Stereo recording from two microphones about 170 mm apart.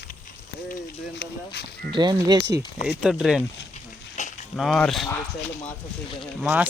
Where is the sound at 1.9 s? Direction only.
25° right (ahead or behind).